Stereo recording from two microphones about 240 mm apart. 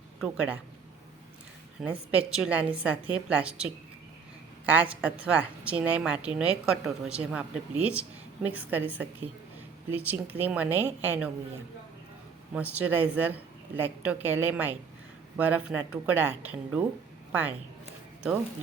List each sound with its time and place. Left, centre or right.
0.2 s speech: centre
1.8 s a woman's voice: centre
12.5 s speech: centre